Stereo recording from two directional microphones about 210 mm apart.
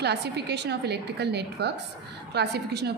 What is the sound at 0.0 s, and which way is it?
A woman's voice, 50° right (ahead or behind).